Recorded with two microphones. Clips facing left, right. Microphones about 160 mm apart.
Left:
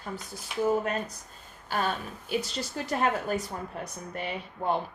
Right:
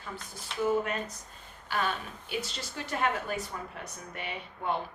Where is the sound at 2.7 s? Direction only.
40° left (ahead or behind).